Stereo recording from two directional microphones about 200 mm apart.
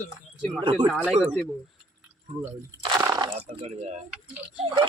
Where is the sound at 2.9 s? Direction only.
15° right (ahead or behind).